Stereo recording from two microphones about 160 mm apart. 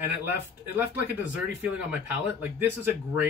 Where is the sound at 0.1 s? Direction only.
10° right (ahead or behind).